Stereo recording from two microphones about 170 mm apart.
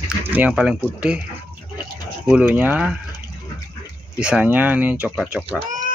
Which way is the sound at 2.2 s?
5° right (ahead or behind).